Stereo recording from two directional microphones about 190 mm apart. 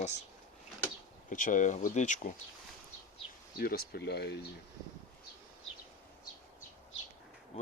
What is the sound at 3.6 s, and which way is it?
Speech, 55° left (ahead or behind).